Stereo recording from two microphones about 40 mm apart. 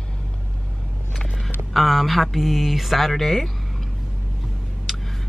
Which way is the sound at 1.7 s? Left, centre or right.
Centre.